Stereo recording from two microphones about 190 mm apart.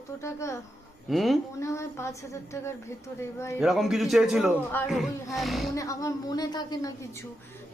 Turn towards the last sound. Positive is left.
turn(degrees=20)  # may be behind; listen again after turning